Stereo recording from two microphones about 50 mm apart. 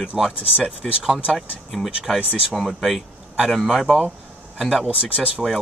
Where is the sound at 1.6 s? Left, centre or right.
Centre.